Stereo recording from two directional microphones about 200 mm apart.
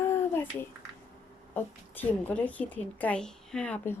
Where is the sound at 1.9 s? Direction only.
10° left (ahead or behind).